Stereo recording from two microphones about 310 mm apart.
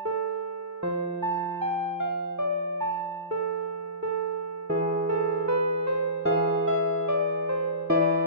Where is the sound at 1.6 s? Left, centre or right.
Right.